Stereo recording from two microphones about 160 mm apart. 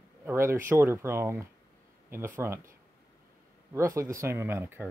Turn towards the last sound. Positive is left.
turn(degrees=-15)  # may be behind; listen again after turning